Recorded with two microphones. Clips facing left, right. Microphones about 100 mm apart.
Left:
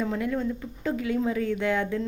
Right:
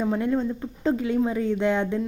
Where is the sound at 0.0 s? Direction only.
25° right (ahead or behind).